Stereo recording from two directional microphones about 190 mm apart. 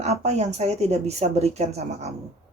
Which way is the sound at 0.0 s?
35° right (ahead or behind).